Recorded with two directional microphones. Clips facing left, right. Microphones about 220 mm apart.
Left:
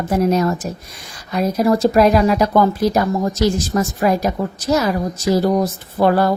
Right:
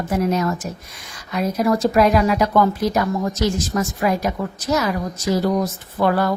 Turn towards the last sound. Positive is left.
turn(degrees=35)  # may be behind; listen again after turning